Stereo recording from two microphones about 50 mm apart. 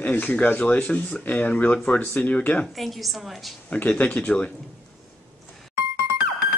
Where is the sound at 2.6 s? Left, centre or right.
Centre.